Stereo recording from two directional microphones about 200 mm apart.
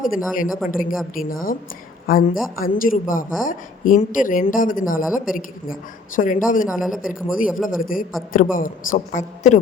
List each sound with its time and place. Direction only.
0.0 s a man's voice: 45° left (ahead or behind)
6.7 s speech: centre (ahead or behind)
7.0 s a man's voice: 45° left (ahead or behind)